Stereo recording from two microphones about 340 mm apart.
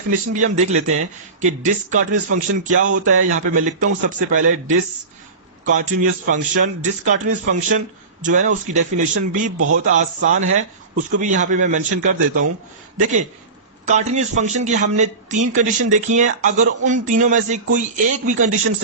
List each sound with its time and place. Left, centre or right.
0.1 s a man's voice: right
5.6 s a man's voice: right
9.6 s a man's voice: right
9.8 s a man's voice: right
13.8 s a man's voice: centre